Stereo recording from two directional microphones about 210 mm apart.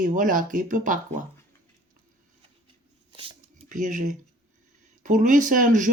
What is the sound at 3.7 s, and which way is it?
Speech, 35° right (ahead or behind).